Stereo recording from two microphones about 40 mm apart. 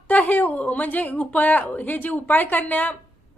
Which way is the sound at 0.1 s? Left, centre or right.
Left.